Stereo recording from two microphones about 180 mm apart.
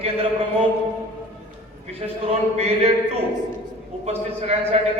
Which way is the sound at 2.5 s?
35° right (ahead or behind).